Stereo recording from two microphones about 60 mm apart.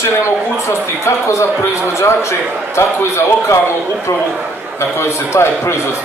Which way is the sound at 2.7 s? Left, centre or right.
Left.